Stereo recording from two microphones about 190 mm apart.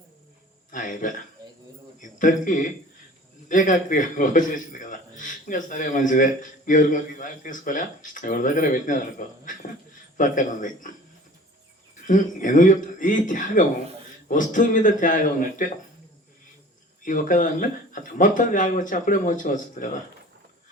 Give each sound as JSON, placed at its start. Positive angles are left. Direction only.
{"t": 0.7, "sound": "a man's voice", "side_deg": 45}
{"t": 12.0, "sound": "a man's voice", "side_deg": 45}
{"t": 17.1, "sound": "a man's voice", "side_deg": 45}